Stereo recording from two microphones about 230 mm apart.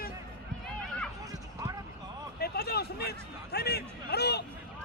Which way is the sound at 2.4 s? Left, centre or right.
Left.